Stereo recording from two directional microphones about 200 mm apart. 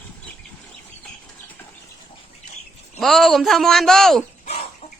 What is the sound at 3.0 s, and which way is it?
Speech, centre (ahead or behind).